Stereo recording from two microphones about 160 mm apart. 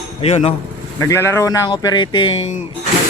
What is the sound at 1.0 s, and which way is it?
Speech, 15° left (ahead or behind).